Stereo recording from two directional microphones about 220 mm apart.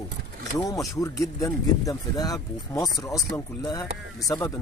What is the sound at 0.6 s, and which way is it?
Speech, 15° left (ahead or behind).